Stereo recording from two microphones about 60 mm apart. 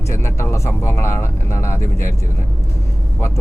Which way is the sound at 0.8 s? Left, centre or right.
Left.